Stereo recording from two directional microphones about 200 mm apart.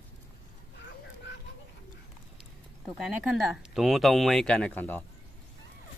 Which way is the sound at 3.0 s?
Centre (ahead or behind).